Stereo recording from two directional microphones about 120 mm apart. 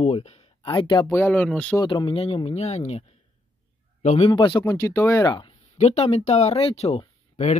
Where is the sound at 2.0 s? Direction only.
55° left (ahead or behind).